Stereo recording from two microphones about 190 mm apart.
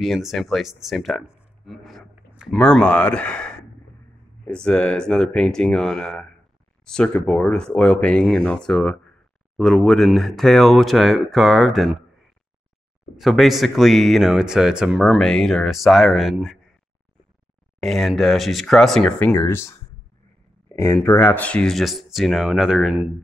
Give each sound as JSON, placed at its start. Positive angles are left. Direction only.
{"t": 0.0, "sound": "speech", "side_deg": 0}
{"t": 13.1, "sound": "speech", "side_deg": 0}
{"t": 17.7, "sound": "speech", "side_deg": 0}
{"t": 20.7, "sound": "speech", "side_deg": 15}